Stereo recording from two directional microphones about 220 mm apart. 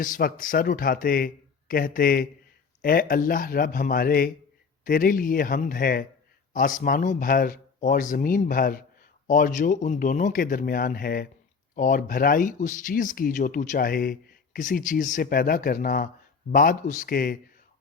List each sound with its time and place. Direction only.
0.0 s speech: 40° left (ahead or behind)